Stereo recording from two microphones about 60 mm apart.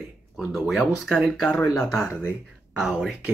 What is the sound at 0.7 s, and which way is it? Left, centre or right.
Speech, centre.